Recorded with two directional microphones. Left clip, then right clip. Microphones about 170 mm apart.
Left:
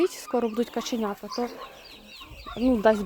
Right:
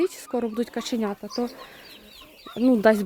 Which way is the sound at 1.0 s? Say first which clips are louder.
Right 1 dB; 40° right (ahead or behind).